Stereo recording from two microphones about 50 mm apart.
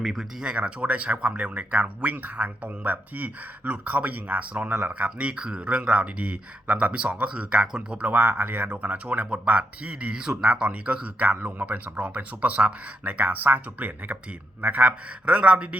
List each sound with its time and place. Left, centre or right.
0.0 s speech: centre
0.4 s speech: right
11.9 s speech: right